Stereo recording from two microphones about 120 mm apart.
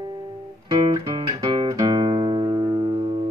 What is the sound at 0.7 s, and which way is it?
Music, 35° right (ahead or behind).